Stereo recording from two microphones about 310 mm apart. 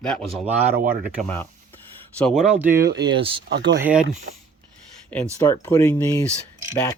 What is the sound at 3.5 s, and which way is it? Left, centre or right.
Speech, right.